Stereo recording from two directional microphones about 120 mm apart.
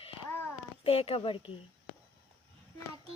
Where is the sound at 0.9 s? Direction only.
55° left (ahead or behind).